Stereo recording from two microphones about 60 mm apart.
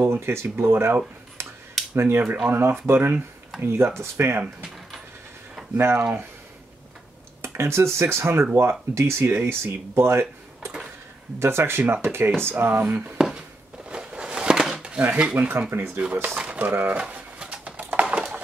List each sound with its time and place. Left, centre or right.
0.0 s speech: right
1.4 s a sound: right
2.0 s speech: right
2.2 s filing: right
2.5 s speech: right
5.8 s speech: right
7.4 s speech: right
13.8 s a sound: centre
15.0 s filing: right
15.3 s speech: right
16.0 s filing: right
16.3 s speech: right
17.4 s a sound: right